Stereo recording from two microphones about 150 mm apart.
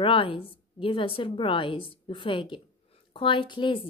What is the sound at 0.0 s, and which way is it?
A woman's voice, 35° left (ahead or behind).